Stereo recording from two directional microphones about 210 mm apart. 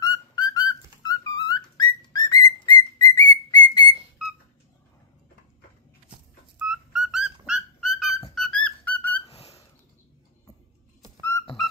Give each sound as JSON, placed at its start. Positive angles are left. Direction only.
{"t": 0.0, "sound": "music", "side_deg": 20}
{"t": 1.5, "sound": "whistle", "side_deg": 20}
{"t": 6.6, "sound": "music", "side_deg": -5}
{"t": 9.2, "sound": "a sound", "side_deg": 30}
{"t": 11.1, "sound": "music", "side_deg": 15}